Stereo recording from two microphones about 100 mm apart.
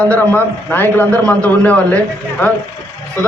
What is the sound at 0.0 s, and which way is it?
A man's voice, 15° left (ahead or behind).